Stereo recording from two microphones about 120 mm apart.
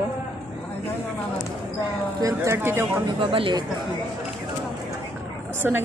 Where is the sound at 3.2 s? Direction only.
45° right (ahead or behind).